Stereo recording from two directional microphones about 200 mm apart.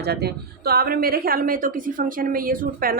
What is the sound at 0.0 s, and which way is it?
A woman's voice, 55° right (ahead or behind).